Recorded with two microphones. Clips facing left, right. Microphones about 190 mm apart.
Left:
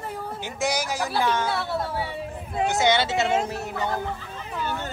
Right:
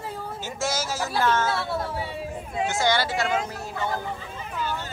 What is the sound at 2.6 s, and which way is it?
Speech, 20° left (ahead or behind).